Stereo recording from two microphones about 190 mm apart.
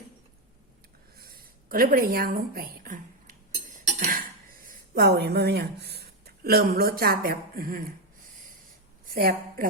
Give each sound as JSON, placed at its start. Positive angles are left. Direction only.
{"t": 1.1, "sound": "a sound", "side_deg": -50}
{"t": 4.9, "sound": "a woman's voice", "side_deg": -60}
{"t": 9.1, "sound": "a woman's voice", "side_deg": -50}